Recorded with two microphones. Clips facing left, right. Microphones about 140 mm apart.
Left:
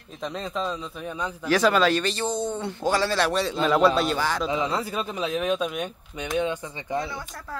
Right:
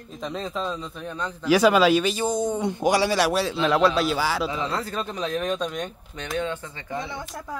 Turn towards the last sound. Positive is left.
turn(degrees=-20)  # may be behind; listen again after turning